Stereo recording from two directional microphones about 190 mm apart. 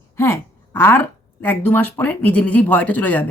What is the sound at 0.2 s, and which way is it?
A woman's voice, 10° left (ahead or behind).